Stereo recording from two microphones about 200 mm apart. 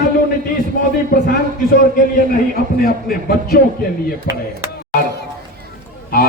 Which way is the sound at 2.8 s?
45° left (ahead or behind).